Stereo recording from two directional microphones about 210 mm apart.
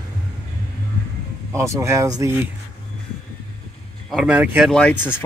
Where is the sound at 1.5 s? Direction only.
15° right (ahead or behind).